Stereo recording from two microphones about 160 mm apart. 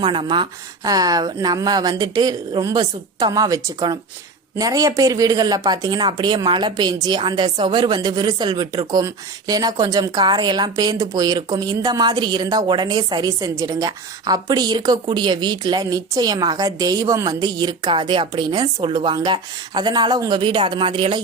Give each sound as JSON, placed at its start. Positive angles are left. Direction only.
{"t": 0.0, "sound": "speech", "side_deg": -30}